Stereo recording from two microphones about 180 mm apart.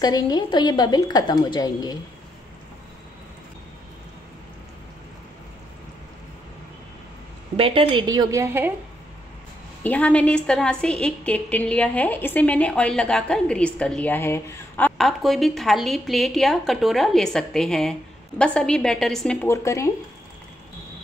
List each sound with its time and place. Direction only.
0.0 s a woman's voice: 20° left (ahead or behind)
7.5 s a woman's voice: 30° right (ahead or behind); by 8.7 s 10° right (ahead or behind)
9.8 s a woman's voice: 5° left (ahead or behind)
19.4 s speech: 15° left (ahead or behind)